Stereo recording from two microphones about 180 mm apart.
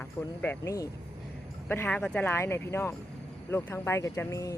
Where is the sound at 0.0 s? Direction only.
10° left (ahead or behind).